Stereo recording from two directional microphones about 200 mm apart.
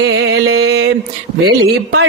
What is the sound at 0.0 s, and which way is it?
Music, 75° right (ahead or behind).